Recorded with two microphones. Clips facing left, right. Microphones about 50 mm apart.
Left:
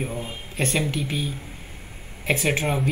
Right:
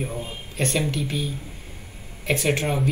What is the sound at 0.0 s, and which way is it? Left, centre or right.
Speech, centre.